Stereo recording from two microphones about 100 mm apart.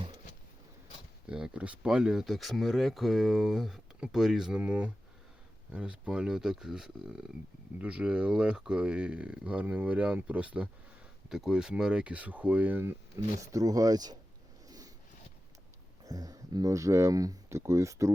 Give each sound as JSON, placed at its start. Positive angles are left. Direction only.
{"t": 1.3, "sound": "speech", "side_deg": -10}
{"t": 13.1, "sound": "speech", "side_deg": -35}
{"t": 14.7, "sound": "a sound", "side_deg": -40}
{"t": 16.0, "sound": "speech", "side_deg": -35}